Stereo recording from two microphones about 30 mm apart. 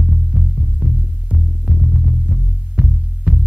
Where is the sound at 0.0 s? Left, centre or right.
Right.